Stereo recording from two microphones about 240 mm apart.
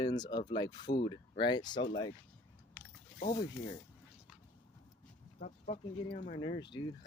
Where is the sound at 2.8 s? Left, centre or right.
Centre.